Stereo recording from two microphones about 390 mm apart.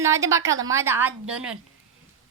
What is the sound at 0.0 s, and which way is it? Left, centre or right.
A woman's voice, centre.